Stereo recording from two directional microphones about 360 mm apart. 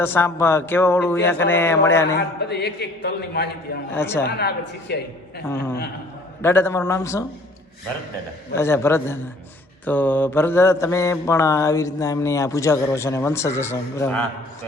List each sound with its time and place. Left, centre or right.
0.0 s mantra: centre
2.1 s a man's voice: left
3.9 s mantra: centre
4.3 s a man's voice: left
5.5 s mantra: centre
8.5 s mantra: centre